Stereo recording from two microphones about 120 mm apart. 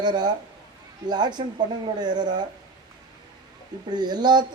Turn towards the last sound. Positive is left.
turn(degrees=-35)  # may be behind; listen again after turning